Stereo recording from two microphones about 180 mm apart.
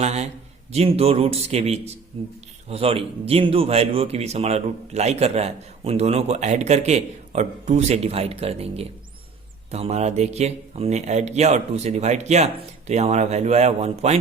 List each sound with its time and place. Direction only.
0.0 s speech: 35° right (ahead or behind)